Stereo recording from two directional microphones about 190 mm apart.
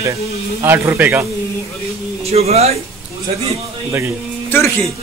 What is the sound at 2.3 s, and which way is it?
Speech, 35° right (ahead or behind).